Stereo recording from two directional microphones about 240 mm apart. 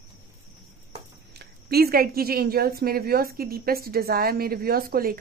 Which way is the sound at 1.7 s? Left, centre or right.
Right.